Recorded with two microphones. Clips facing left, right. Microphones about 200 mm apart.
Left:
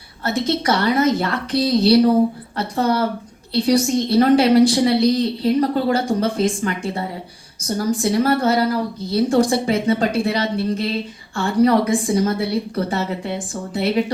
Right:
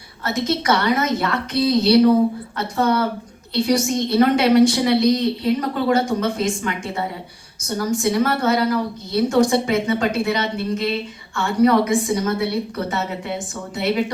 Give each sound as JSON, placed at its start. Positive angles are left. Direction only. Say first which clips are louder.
{"t": 0.4, "sound": "a woman's voice", "louder": "even", "side_deg": 35}